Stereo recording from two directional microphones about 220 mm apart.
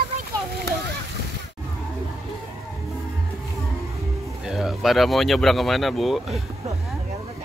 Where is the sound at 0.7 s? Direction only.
50° right (ahead or behind).